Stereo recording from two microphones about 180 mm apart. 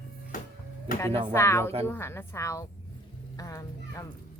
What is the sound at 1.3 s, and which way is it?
Speech, 15° left (ahead or behind).